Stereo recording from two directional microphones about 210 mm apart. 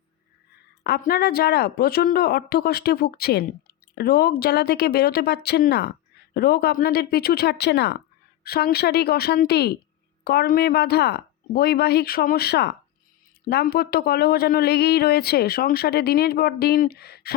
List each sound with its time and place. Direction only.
0.9 s speech: 45° left (ahead or behind)